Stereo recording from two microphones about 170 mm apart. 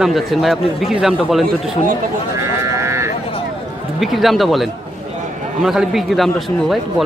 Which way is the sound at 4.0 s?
Centre (ahead or behind).